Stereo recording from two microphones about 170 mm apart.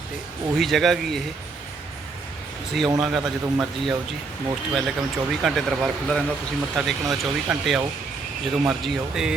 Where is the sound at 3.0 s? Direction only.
Centre (ahead or behind).